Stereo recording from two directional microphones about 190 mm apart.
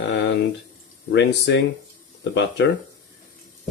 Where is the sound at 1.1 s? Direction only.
65° left (ahead or behind).